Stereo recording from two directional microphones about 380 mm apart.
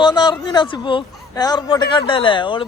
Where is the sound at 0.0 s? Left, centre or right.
Centre.